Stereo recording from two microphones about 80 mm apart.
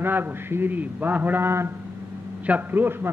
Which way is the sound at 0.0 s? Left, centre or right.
Right.